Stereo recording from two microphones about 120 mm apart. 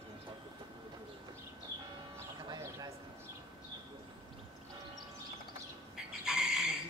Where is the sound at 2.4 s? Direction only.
35° right (ahead or behind).